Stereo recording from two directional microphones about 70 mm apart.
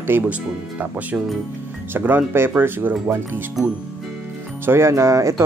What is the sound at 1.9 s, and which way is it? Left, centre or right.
Speech, right.